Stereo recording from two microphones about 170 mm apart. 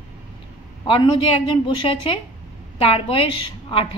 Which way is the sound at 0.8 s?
30° left (ahead or behind).